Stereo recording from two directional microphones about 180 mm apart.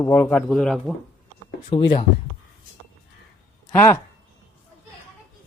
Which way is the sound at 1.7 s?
25° left (ahead or behind).